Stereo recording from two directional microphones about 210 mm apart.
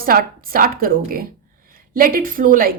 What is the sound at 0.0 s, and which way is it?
A woman's voice, 45° right (ahead or behind).